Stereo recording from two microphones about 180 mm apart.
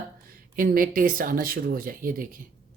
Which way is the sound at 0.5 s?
50° right (ahead or behind).